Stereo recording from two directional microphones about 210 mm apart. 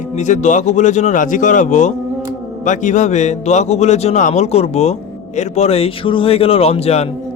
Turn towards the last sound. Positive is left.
turn(degrees=30)  # may be behind; listen again after turning